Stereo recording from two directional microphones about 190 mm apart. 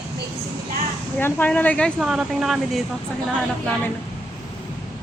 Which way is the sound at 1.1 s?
10° left (ahead or behind).